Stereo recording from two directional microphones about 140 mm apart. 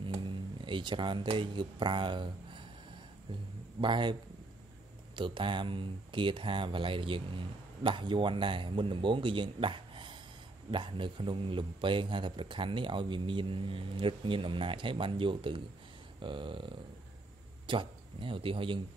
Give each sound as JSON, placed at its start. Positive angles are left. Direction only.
{"t": 0.0, "sound": "speech", "side_deg": -35}
{"t": 3.8, "sound": "speech", "side_deg": -35}